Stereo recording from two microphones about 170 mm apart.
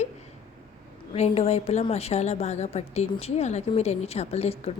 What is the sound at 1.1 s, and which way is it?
A woman's voice, 40° left (ahead or behind).